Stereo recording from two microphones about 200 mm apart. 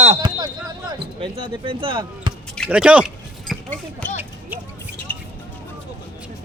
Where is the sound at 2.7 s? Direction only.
5° right (ahead or behind).